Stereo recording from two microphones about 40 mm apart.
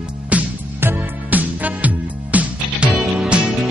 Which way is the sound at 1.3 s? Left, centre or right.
Right.